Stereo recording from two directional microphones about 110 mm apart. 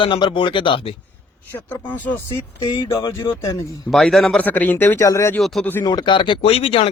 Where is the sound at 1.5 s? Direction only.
15° left (ahead or behind).